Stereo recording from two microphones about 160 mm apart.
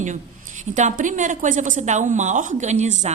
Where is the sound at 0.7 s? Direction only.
50° right (ahead or behind).